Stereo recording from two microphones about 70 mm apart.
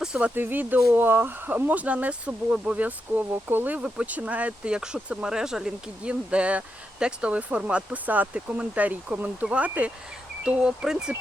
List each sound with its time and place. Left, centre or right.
0.0 s speech: centre
0.3 s speech: right; by 11.1 s centre